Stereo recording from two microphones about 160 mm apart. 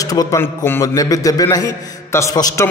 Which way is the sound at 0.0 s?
20° left (ahead or behind).